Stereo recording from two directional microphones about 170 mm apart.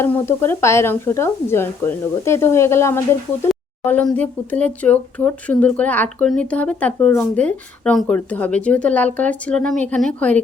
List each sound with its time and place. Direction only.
0.0 s speech: 15° left (ahead or behind)